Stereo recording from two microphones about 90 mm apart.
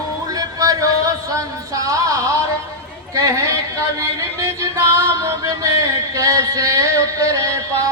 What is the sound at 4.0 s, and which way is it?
Music, 30° right (ahead or behind).